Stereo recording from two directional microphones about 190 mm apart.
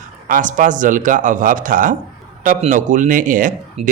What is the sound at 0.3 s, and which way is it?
Speech, 45° right (ahead or behind).